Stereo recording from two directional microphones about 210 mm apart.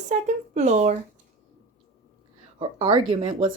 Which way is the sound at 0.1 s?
35° right (ahead or behind).